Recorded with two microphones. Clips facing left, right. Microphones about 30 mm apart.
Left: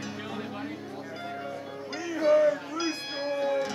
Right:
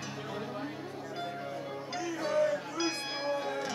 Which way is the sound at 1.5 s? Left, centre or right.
Centre.